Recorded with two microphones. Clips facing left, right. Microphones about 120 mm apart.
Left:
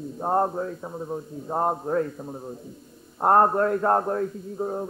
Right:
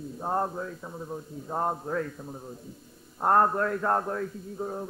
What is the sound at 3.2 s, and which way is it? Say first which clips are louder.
A man's voice: left 4 dB; 30° left (ahead or behind).